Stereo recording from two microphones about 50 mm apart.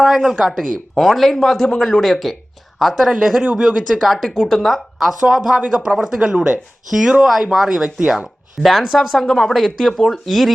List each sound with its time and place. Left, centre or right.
0.0 s speech: centre
5.5 s speech: centre
7.9 s speech: centre
8.6 s speech: centre